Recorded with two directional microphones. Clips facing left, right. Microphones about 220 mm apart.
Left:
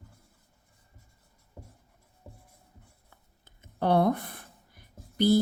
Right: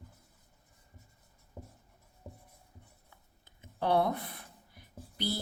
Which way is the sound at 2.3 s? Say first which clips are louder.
Right 1 dB; 15° right (ahead or behind).